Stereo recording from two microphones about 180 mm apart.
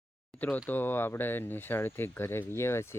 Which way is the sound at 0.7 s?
10° left (ahead or behind).